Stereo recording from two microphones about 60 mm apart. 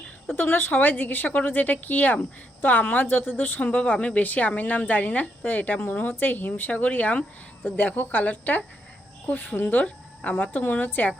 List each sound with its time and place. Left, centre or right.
0.3 s a woman's voice: left